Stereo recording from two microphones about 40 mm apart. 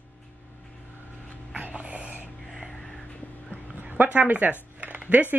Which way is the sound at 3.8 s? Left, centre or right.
Right.